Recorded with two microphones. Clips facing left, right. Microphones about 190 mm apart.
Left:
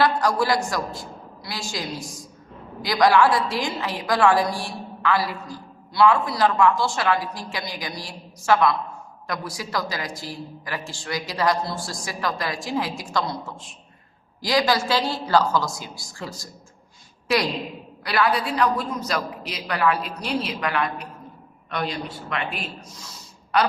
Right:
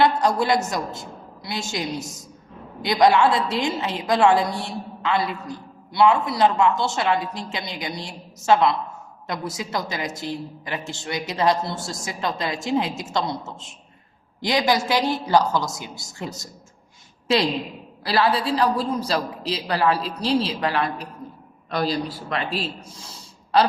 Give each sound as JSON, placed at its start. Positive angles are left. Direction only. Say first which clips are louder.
{"t": 0.0, "sound": "a woman's voice", "louder": "right 1 dB", "side_deg": -20}
{"t": 18.0, "sound": "a man's voice", "louder": "right 2 dB", "side_deg": -30}